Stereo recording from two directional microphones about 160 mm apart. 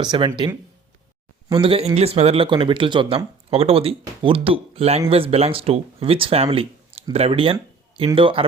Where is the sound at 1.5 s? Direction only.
35° right (ahead or behind).